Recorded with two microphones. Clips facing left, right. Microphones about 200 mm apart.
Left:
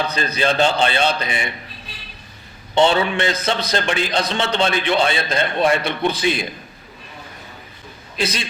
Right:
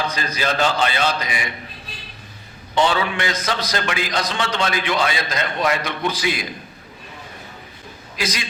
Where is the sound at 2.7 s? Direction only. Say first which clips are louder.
Left 3 dB; 25° left (ahead or behind).